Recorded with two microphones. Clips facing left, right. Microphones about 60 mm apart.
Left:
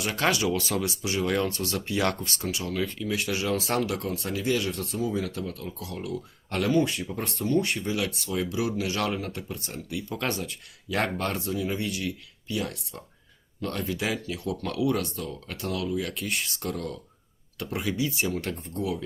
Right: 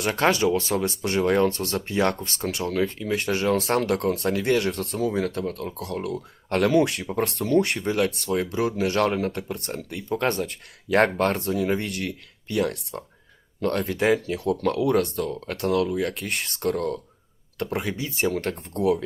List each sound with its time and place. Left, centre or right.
0.2 s speech: right
1.0 s speech: right
1.3 s speech: right
10.1 s speech: right